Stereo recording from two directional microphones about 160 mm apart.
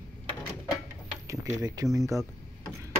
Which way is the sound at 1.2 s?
20° right (ahead or behind).